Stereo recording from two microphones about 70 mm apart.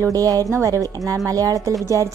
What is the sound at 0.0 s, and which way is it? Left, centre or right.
Speech, right.